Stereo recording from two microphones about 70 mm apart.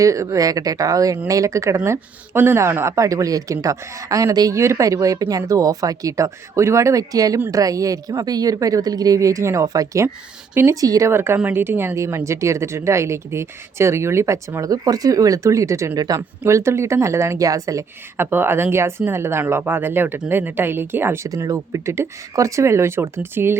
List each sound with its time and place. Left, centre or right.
0.0 s speech: right
9.6 s speech: right
11.1 s speech: right
11.9 s speech: right
16.0 s speech: right
16.4 s speech: right
18.2 s speech: right
21.2 s speech: right